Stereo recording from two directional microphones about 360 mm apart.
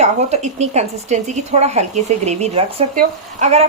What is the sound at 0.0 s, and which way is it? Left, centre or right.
Speech, centre.